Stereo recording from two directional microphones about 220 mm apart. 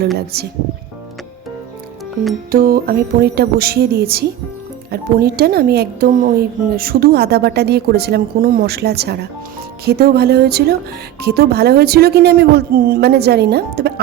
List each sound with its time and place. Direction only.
0.3 s speech: 45° right (ahead or behind)
2.5 s speech: 40° right (ahead or behind)